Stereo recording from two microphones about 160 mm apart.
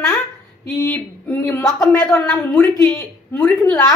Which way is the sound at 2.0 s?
5° left (ahead or behind).